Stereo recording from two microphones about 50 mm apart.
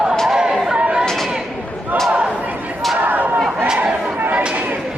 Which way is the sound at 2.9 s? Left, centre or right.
Right.